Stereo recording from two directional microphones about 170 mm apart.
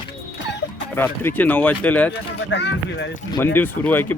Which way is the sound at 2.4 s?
90° left.